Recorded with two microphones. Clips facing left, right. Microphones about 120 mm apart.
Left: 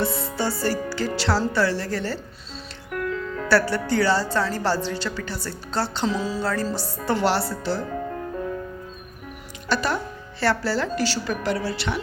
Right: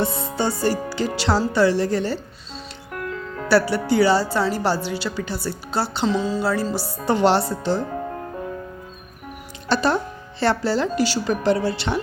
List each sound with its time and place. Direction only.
0.0 s music: 20° right (ahead or behind)
1.5 s speech: 20° right (ahead or behind)
2.9 s speech: 5° right (ahead or behind)
6.1 s music: centre (ahead or behind)
6.4 s music: 10° right (ahead or behind)
7.0 s speech: 20° right (ahead or behind)
9.6 s speech: 30° right (ahead or behind)